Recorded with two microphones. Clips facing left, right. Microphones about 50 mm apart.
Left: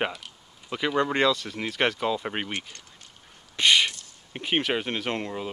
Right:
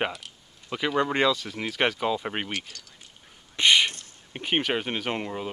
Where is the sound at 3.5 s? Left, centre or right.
Centre.